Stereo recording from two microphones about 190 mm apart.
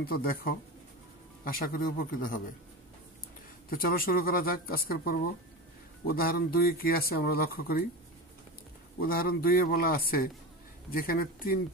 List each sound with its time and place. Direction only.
0.0 s speech: 50° left (ahead or behind)
3.7 s speech: 50° left (ahead or behind)
9.0 s speech: 50° left (ahead or behind)